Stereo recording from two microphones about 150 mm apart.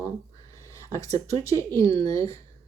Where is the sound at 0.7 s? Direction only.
20° left (ahead or behind).